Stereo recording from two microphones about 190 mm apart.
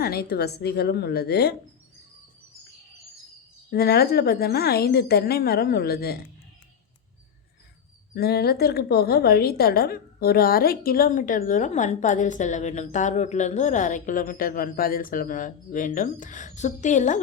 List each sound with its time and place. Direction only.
0.0 s a woman's voice: 55° left (ahead or behind)
3.7 s a woman's voice: 55° left (ahead or behind)
8.1 s a woman's voice: 55° left (ahead or behind); by 17.2 s 40° left (ahead or behind)